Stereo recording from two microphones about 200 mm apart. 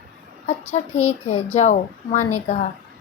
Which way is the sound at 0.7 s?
35° left (ahead or behind).